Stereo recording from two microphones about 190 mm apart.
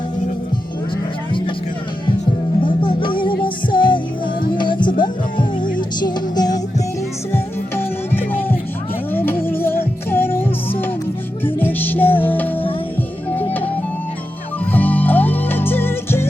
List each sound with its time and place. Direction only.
2.6 s music: 25° left (ahead or behind)
6.0 s music: 20° left (ahead or behind)
7.3 s music: 10° left (ahead or behind)